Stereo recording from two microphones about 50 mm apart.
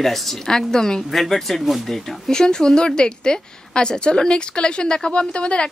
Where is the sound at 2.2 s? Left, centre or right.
Centre.